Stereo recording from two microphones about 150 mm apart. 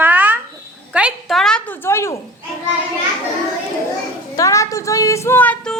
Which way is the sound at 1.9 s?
15° left (ahead or behind).